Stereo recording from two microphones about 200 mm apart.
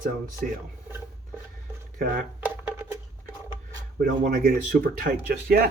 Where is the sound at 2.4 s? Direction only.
5° right (ahead or behind).